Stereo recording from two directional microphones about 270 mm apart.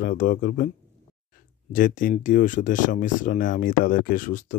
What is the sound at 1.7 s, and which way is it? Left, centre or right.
Speech, left.